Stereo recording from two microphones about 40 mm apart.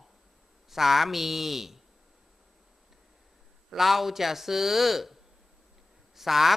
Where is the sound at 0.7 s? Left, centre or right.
Centre.